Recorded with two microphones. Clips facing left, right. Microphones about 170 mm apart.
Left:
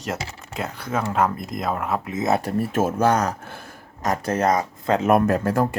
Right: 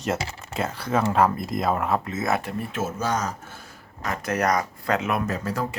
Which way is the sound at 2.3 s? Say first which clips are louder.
Left 6 dB; 35° left (ahead or behind).